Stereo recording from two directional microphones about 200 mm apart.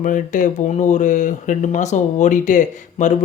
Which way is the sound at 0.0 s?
40° left (ahead or behind).